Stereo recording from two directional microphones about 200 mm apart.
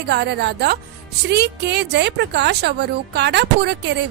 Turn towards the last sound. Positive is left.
turn(degrees=-60)  # may be behind; listen again after turning